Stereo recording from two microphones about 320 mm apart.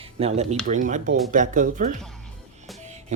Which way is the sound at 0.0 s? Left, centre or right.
Centre.